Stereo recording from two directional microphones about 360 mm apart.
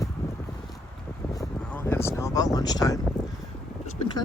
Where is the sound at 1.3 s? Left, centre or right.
Centre.